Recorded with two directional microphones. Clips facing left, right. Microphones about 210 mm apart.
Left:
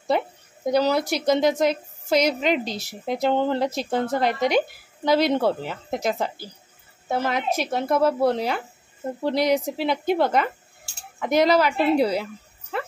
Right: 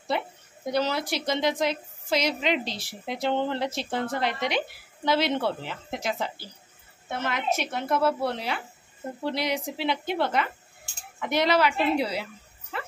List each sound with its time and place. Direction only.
0.7 s a woman's voice: 40° left (ahead or behind)